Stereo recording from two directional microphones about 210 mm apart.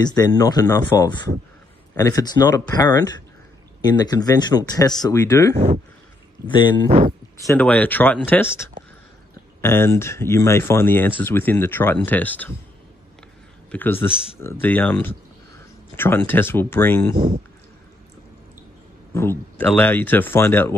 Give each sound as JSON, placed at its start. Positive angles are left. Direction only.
{"t": 0.0, "sound": "speech", "side_deg": 20}
{"t": 7.3, "sound": "speech", "side_deg": 10}
{"t": 13.7, "sound": "a man's voice", "side_deg": 10}
{"t": 19.1, "sound": "speech", "side_deg": 10}